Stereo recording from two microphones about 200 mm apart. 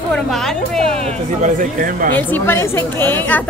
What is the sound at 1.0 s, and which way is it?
Speech, 40° right (ahead or behind).